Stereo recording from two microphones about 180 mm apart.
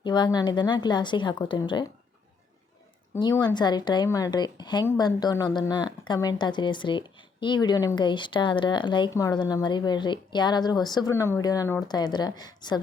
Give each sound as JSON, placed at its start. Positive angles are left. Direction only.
{"t": 0.0, "sound": "a woman's voice", "side_deg": 25}
{"t": 3.2, "sound": "a woman's voice", "side_deg": 20}